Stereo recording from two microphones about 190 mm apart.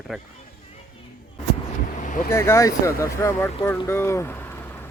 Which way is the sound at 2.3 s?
15° left (ahead or behind).